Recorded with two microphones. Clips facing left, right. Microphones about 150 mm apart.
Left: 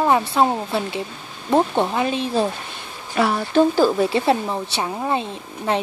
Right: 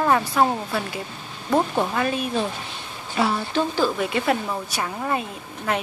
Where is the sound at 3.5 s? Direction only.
40° left (ahead or behind).